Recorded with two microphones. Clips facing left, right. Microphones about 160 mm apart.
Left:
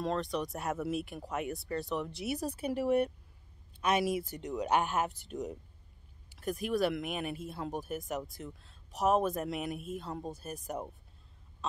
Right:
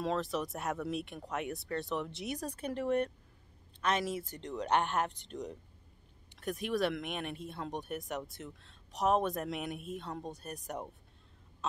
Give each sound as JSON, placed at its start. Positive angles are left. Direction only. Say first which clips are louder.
{"t": 0.0, "sound": "speech", "louder": "left 1 dB", "side_deg": 0}